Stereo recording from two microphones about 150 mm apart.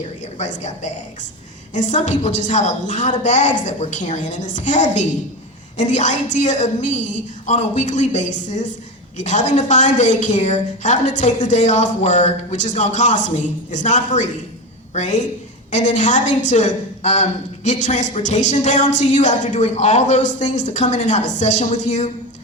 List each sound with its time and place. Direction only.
0.3 s a woman's voice: 50° left (ahead or behind)